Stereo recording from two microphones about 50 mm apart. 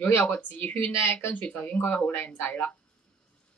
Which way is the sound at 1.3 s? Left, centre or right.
Left.